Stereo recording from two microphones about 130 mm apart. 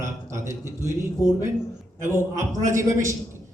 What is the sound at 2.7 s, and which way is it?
Speech, 25° right (ahead or behind).